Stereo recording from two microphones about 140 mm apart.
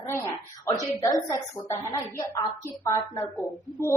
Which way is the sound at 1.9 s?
20° left (ahead or behind).